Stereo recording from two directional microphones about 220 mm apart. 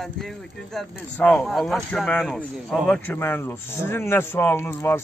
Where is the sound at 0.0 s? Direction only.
Centre (ahead or behind).